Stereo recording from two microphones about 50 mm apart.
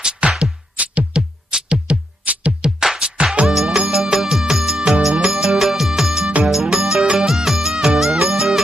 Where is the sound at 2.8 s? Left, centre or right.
Centre.